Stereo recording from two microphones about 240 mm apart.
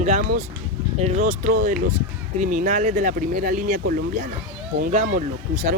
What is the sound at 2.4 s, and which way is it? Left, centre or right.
Speech, right.